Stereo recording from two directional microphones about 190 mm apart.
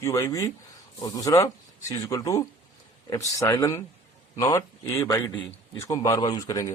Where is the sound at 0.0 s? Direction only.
15° left (ahead or behind).